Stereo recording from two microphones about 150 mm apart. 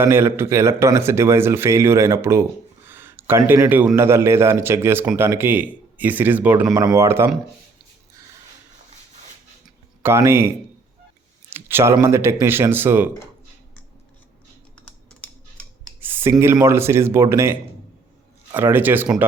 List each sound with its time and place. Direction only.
0.0 s a man's voice: 15° right (ahead or behind)
10.0 s a man's voice: 15° right (ahead or behind)
11.4 s a sound: 15° right (ahead or behind)
12.0 s a man's voice: 15° right (ahead or behind)
14.8 s computer keyboard: 5° left (ahead or behind)
16.0 s a sound: 15° right (ahead or behind)
16.4 s a man's voice: 15° right (ahead or behind)